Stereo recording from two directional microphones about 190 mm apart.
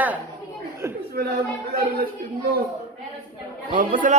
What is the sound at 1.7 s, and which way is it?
Speech, 55° right (ahead or behind).